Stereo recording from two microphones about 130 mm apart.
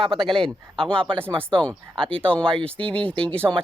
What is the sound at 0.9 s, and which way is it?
Speech, 40° right (ahead or behind).